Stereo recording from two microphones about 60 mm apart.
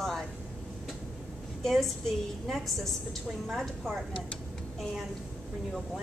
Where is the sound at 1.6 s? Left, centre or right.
Centre.